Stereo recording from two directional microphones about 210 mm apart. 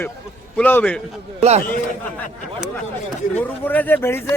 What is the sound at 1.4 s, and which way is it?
Speech, 30° right (ahead or behind).